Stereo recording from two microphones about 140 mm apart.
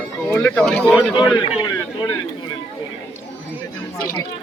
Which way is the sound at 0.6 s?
Centre (ahead or behind).